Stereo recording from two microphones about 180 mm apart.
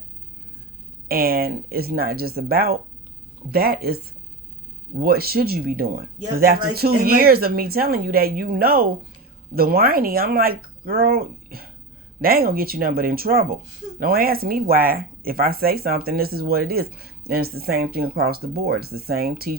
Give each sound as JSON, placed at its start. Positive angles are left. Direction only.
{"t": 1.0, "sound": "speech", "side_deg": -55}